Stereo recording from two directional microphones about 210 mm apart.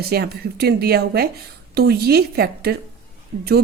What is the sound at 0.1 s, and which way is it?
Speech, 50° right (ahead or behind).